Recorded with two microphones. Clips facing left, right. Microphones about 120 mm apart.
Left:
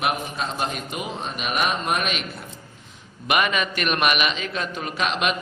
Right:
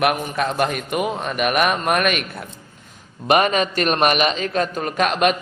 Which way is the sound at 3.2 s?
40° right (ahead or behind).